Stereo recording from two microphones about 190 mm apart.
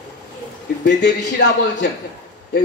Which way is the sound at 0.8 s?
65° left (ahead or behind).